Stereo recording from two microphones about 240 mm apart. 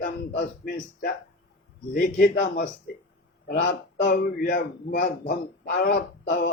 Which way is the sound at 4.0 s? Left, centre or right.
Left.